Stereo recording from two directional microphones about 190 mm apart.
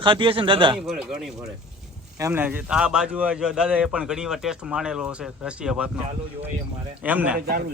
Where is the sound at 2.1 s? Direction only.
15° right (ahead or behind).